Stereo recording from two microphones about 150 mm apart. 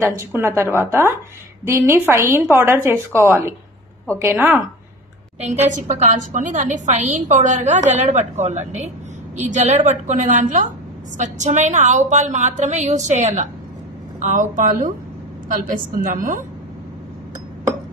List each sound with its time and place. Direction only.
0.2 s a woman's voice: 15° right (ahead or behind)
5.7 s a woman's voice: 55° right (ahead or behind)